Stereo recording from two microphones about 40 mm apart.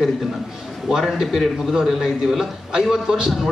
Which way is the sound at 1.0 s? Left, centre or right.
Centre.